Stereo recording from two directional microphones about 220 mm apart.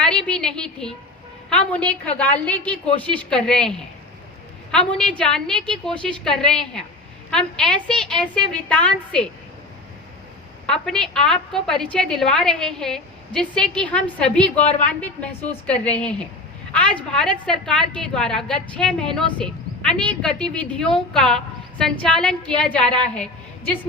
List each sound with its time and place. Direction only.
0.0 s a sound: 5° left (ahead or behind)
1.5 s a woman's voice: 5° left (ahead or behind)
10.7 s a woman's voice: 5° left (ahead or behind)